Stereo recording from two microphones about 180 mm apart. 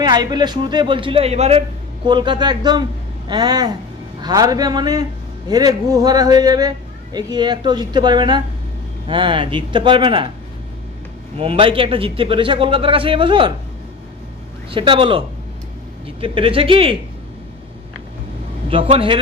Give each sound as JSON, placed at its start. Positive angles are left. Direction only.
{"t": 0.0, "sound": "a man's voice", "side_deg": -25}
{"t": 2.0, "sound": "a man's voice", "side_deg": -25}
{"t": 11.3, "sound": "a man's voice", "side_deg": -30}
{"t": 14.7, "sound": "a man's voice", "side_deg": -30}
{"t": 18.7, "sound": "a man's voice", "side_deg": -30}